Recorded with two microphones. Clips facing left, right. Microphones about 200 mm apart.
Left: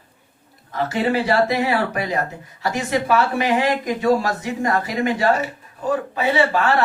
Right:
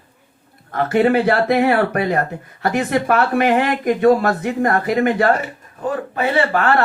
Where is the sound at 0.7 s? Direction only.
55° right (ahead or behind).